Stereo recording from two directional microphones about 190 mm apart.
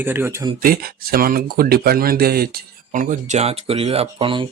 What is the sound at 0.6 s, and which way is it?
Speech, 50° right (ahead or behind).